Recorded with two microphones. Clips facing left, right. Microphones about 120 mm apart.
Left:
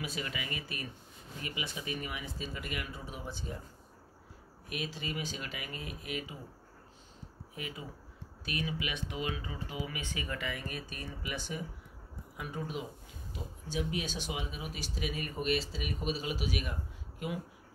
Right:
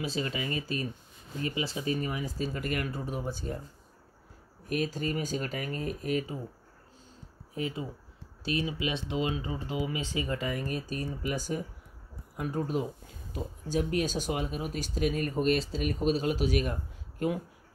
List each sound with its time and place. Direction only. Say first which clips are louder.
0.0 s speech: right 7 dB; 30° right (ahead or behind)
4.6 s speech: right 8 dB; 45° right (ahead or behind)
7.5 s speech: right 9 dB; 30° right (ahead or behind)
10.4 s speech: right 6 dB; 40° right (ahead or behind)